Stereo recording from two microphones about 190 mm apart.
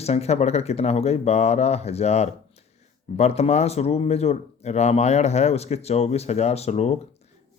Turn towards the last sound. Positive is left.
turn(degrees=35)  # may be behind; listen again after turning